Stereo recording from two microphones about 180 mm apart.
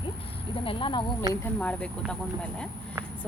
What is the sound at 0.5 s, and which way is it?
Speech, 30° left (ahead or behind).